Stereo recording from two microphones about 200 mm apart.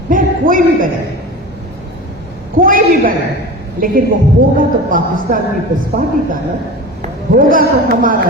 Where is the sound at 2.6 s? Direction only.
45° right (ahead or behind).